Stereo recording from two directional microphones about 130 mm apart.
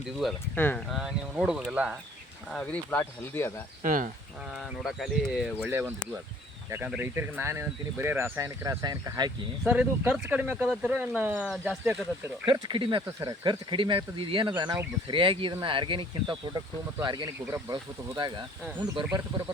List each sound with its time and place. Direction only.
0.5 s speech: 15° left (ahead or behind)
0.9 s speech: centre (ahead or behind)
2.5 s speech: 10° left (ahead or behind)
3.8 s speech: 90° right
4.5 s speech: centre (ahead or behind); by 9.3 s 30° right (ahead or behind)
9.6 s speech: 10° right (ahead or behind)
12.5 s speech: 40° right (ahead or behind)
13.0 s speech: 25° right (ahead or behind)
13.4 s speech: 35° right (ahead or behind)